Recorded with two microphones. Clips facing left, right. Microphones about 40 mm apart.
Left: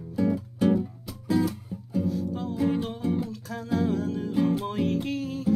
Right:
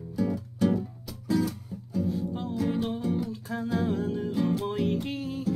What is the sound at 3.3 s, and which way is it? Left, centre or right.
Music, right.